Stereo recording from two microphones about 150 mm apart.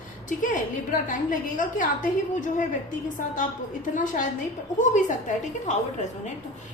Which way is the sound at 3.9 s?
60° left (ahead or behind).